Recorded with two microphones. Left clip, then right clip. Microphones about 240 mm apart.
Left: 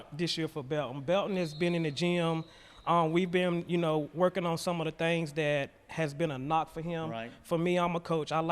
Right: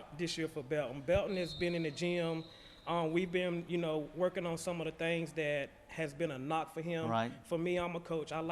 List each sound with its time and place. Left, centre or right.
0.2 s a man's voice: left
7.5 s a man's voice: left